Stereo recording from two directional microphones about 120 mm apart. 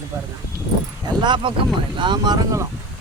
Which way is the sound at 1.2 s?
40° right (ahead or behind).